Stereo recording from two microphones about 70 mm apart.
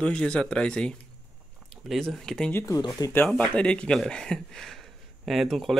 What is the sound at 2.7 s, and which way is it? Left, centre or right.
Speech, left.